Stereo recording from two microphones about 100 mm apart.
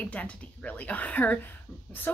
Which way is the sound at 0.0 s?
15° left (ahead or behind).